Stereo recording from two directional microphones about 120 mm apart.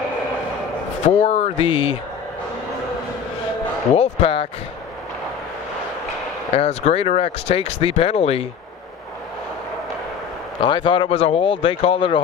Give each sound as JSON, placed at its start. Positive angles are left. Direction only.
{"t": 1.0, "sound": "speech", "side_deg": 65}
{"t": 3.9, "sound": "speech", "side_deg": 55}
{"t": 6.5, "sound": "speech", "side_deg": 60}
{"t": 10.6, "sound": "speech", "side_deg": 45}